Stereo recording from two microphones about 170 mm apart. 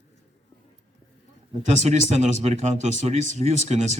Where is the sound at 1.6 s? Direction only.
45° right (ahead or behind).